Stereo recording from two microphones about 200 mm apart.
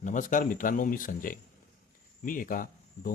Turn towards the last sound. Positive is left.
turn(degrees=45)  # may be behind; listen again after turning